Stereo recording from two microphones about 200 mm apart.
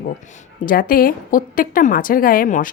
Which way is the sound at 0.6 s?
45° left (ahead or behind).